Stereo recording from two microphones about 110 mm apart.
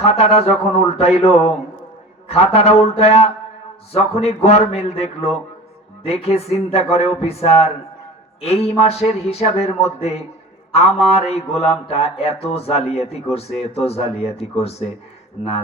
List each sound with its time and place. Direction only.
0.0 s mantra: 65° left (ahead or behind)
3.9 s a man's voice: 65° left (ahead or behind)
6.0 s mantra: 65° left (ahead or behind)
8.4 s a man's voice: 70° left (ahead or behind)
10.7 s mantra: 65° left (ahead or behind)
13.6 s a man's voice: 70° left (ahead or behind)